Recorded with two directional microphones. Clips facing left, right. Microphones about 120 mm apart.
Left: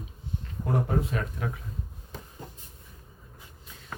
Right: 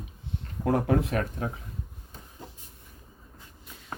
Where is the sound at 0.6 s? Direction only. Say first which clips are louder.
Right 4 dB; 75° right (ahead or behind).